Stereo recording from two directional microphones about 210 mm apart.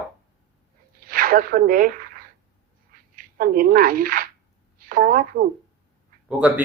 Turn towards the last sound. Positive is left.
turn(degrees=-5)  # may be behind; listen again after turning